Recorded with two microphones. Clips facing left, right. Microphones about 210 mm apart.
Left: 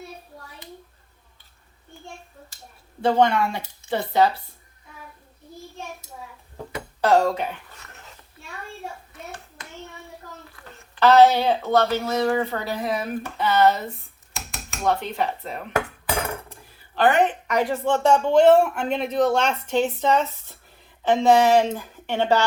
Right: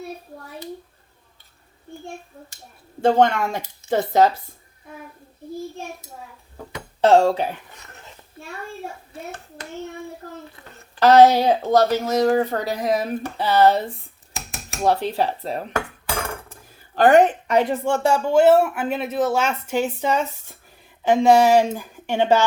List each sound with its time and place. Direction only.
3.0 s speech: 45° right (ahead or behind)
7.0 s speech: 25° right (ahead or behind)
9.1 s speech: 30° right (ahead or behind)
11.0 s speech: 40° right (ahead or behind)
16.5 s a sound: 45° right (ahead or behind)
17.5 s speech: 20° right (ahead or behind)